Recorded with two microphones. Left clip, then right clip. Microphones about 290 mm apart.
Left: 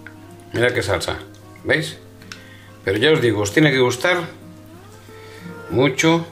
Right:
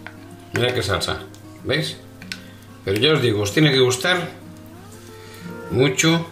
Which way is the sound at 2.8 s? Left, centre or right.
Left.